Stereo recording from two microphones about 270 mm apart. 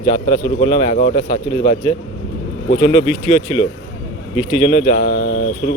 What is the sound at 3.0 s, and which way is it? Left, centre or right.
Speech, right.